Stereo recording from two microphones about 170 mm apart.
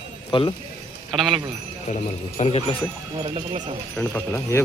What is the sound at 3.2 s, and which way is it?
Speech, 35° right (ahead or behind).